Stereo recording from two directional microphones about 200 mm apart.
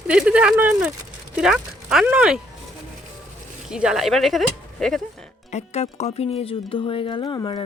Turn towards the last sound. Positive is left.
turn(degrees=25)  # may be behind; listen again after turning